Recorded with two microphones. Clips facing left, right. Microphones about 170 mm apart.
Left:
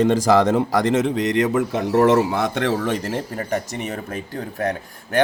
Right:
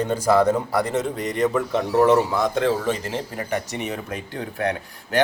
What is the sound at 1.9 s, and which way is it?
Speech, 75° left (ahead or behind).